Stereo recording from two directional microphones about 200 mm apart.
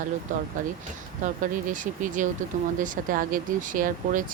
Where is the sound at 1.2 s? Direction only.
40° right (ahead or behind).